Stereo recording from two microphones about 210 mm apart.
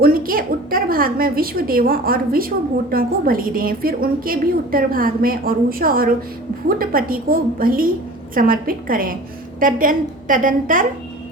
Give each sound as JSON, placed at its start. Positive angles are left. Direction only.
{"t": 0.0, "sound": "a woman's voice", "side_deg": -45}